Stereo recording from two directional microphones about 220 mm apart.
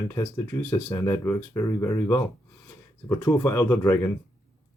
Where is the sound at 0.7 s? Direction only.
10° left (ahead or behind).